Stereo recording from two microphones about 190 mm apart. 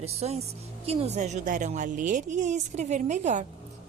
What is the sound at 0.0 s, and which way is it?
A woman's voice, 35° right (ahead or behind).